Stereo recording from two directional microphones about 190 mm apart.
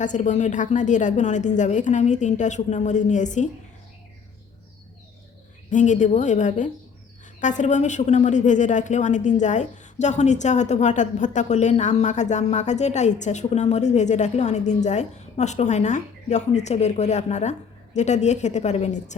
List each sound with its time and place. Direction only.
0.0 s a woman's voice: 40° left (ahead or behind)
5.7 s a woman's voice: 40° left (ahead or behind)